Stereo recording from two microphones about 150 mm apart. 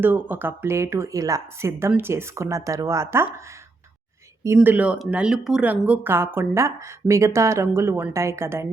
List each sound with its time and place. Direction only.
0.0 s speech: 15° right (ahead or behind)
4.4 s speech: 10° right (ahead or behind)